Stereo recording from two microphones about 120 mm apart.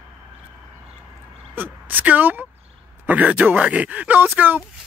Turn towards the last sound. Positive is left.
turn(degrees=-15)  # may be behind; listen again after turning